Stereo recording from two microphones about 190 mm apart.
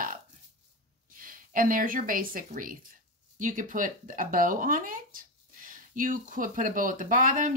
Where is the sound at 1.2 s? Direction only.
45° right (ahead or behind).